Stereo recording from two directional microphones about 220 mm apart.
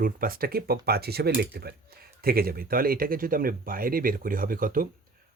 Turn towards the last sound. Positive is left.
turn(degrees=-40)  # may be behind; listen again after turning